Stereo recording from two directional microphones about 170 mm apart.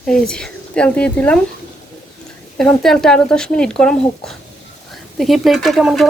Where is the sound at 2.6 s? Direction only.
Centre (ahead or behind).